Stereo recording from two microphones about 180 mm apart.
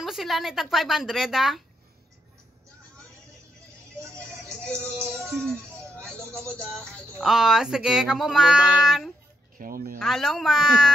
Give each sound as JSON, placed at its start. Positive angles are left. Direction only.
{"t": 0.0, "sound": "speech", "side_deg": 0}
{"t": 4.1, "sound": "music", "side_deg": 5}
{"t": 5.0, "sound": "speech", "side_deg": 5}
{"t": 6.0, "sound": "a sound", "side_deg": 5}
{"t": 6.5, "sound": "speech", "side_deg": 5}
{"t": 9.6, "sound": "speech", "side_deg": -50}
{"t": 9.9, "sound": "speech", "side_deg": 0}